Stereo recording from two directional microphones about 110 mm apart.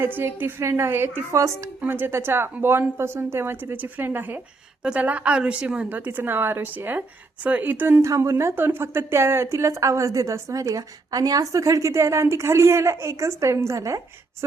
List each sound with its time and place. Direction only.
0.0 s a woman's voice: 20° right (ahead or behind)
1.8 s a woman's voice: 20° right (ahead or behind)